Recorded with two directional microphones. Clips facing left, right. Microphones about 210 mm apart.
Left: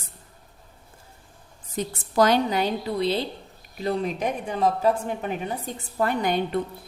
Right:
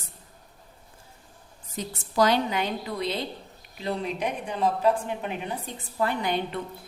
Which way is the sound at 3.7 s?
45° left (ahead or behind).